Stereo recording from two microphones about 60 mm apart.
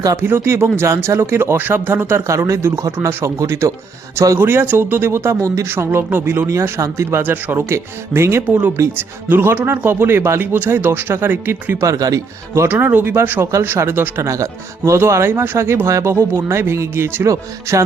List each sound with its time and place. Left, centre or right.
0.2 s speech: right
2.5 s speech: right
4.4 s speech: right
5.6 s speech: right
6.5 s speech: right
7.7 s speech: right
11.8 s speech: right
12.6 s speech: right
13.4 s speech: right
14.2 s speech: right
17.2 s speech: right